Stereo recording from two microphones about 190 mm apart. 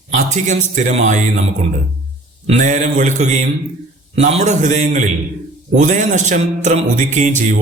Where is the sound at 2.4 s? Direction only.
40° right (ahead or behind).